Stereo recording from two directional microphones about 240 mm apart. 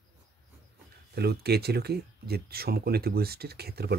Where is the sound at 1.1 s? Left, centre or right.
Right.